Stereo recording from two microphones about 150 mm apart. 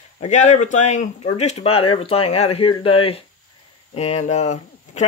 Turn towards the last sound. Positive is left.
turn(degrees=50)  # may be behind; listen again after turning